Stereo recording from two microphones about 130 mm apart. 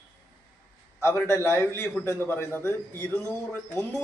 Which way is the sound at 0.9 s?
20° left (ahead or behind).